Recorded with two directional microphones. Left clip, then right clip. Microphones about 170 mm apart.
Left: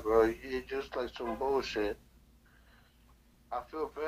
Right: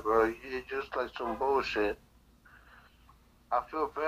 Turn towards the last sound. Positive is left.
turn(degrees=-15)  # may be behind; listen again after turning